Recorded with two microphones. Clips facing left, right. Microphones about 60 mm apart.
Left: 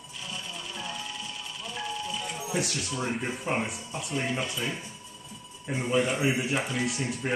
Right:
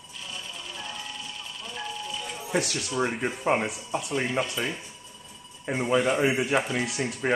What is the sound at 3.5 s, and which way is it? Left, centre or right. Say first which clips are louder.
Speech: right 6 dB; right.